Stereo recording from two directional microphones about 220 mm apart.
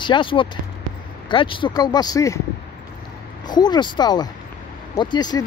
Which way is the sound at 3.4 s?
20° left (ahead or behind).